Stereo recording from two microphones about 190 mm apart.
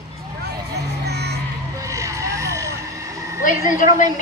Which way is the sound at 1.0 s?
60° right (ahead or behind).